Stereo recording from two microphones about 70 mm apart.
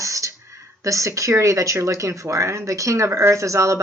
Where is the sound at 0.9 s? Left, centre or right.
Right.